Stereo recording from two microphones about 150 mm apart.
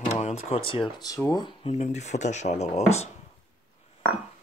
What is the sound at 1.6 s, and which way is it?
Speech, 45° left (ahead or behind).